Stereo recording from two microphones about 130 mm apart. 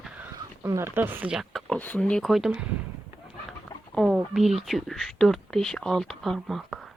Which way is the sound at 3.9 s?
Centre (ahead or behind).